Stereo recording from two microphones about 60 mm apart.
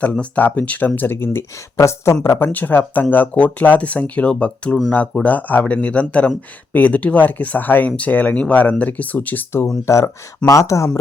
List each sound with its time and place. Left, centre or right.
0.0 s speech: left
2.5 s speech: left
9.8 s speech: left
10.4 s speech: left